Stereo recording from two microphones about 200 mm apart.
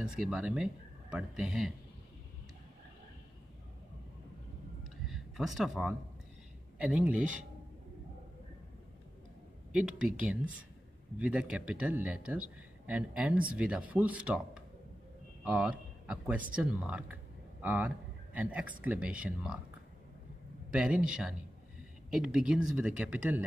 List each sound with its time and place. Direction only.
0.0 s a man's voice: 5° right (ahead or behind)
4.8 s a sound: centre (ahead or behind)
6.8 s a man's voice: 5° right (ahead or behind)
9.7 s a man's voice: 5° right (ahead or behind)
20.7 s a man's voice: 5° right (ahead or behind)